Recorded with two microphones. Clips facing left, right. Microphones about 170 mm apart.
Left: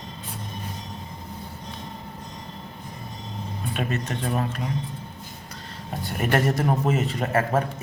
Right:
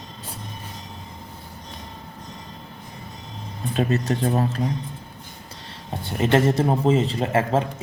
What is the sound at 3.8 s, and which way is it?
Speech, 35° right (ahead or behind).